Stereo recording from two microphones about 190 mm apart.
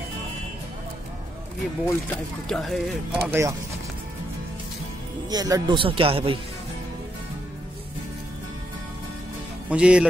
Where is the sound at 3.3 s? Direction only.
15° right (ahead or behind).